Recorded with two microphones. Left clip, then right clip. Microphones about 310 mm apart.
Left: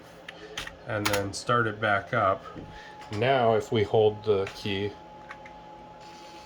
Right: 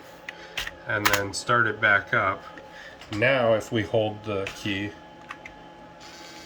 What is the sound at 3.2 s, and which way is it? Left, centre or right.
Speech, centre.